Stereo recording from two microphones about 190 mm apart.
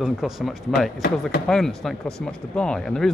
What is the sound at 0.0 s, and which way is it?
Speech, centre (ahead or behind).